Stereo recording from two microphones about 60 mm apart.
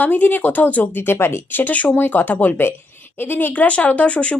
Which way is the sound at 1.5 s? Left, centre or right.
Left.